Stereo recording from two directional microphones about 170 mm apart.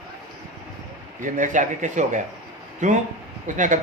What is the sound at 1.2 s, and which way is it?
Speech, 50° right (ahead or behind).